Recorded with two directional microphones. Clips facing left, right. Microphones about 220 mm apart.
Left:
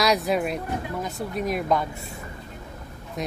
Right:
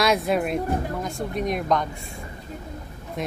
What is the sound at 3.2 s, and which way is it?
Vehicle, centre (ahead or behind).